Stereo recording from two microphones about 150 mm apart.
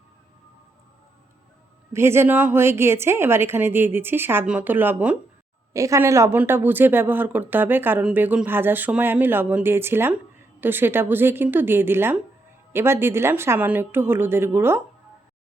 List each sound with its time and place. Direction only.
1.9 s speech: 15° right (ahead or behind)